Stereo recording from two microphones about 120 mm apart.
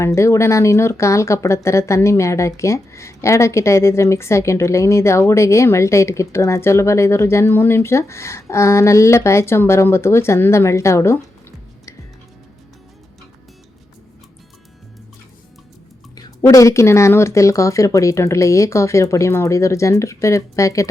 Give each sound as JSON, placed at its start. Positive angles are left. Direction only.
{"t": 0.0, "sound": "speech", "side_deg": 25}
{"t": 16.1, "sound": "speech", "side_deg": 25}